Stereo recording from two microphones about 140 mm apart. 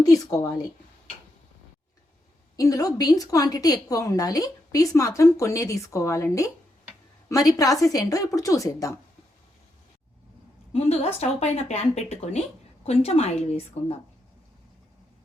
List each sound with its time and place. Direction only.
0.0 s a woman's voice: 25° left (ahead or behind)
2.6 s a woman's voice: 25° left (ahead or behind)
10.7 s speech: 45° left (ahead or behind)